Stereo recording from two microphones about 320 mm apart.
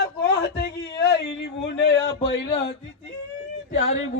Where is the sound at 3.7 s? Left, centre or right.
Left.